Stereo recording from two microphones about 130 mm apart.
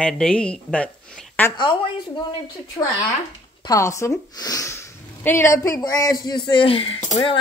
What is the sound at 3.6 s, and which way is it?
Speech, 25° left (ahead or behind).